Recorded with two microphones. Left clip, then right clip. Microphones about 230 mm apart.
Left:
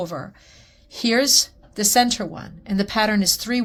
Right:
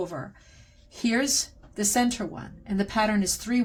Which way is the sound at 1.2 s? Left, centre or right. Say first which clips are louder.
Left 12 dB; left.